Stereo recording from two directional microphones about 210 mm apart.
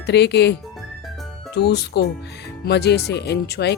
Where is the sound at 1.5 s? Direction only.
50° left (ahead or behind).